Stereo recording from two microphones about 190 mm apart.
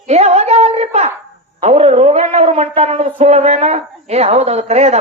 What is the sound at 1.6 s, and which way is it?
A man's voice, 35° right (ahead or behind).